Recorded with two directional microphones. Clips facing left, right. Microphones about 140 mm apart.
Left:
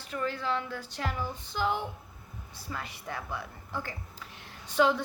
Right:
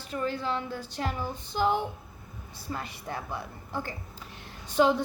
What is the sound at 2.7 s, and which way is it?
Speech, 30° right (ahead or behind).